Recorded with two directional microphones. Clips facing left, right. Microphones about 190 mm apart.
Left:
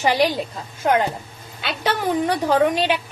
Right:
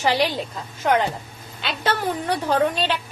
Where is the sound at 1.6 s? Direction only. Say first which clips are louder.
Left 1 dB; 15° left (ahead or behind).